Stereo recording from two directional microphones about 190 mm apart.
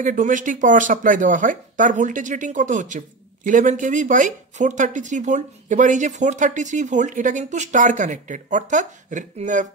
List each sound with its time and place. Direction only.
0.0 s speech: 45° right (ahead or behind)